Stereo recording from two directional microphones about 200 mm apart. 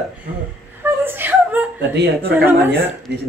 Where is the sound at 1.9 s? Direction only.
55° right (ahead or behind).